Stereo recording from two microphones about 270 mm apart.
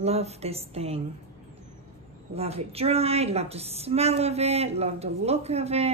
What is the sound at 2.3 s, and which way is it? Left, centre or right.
A woman's voice, right.